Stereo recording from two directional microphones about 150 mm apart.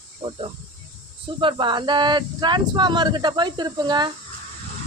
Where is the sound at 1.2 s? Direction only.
35° right (ahead or behind).